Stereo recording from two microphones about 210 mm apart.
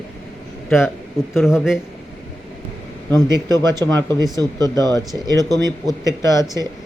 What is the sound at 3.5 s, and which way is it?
Speech, 10° left (ahead or behind).